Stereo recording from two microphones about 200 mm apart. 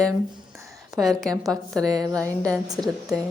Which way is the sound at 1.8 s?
20° right (ahead or behind).